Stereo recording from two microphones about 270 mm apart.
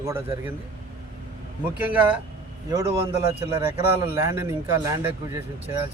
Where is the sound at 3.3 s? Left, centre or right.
Right.